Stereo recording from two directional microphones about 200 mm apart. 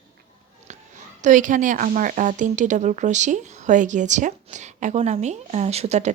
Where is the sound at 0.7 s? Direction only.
35° right (ahead or behind).